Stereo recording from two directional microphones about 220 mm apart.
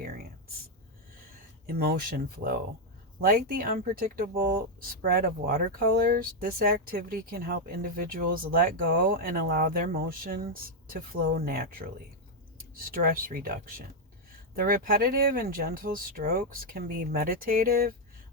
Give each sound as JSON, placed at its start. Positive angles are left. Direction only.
{"t": 1.7, "sound": "speech", "side_deg": -45}